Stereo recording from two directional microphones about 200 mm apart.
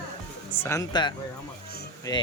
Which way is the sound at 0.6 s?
15° left (ahead or behind).